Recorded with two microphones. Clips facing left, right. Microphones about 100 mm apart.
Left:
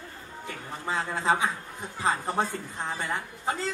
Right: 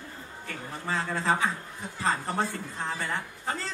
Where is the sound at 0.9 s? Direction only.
20° left (ahead or behind).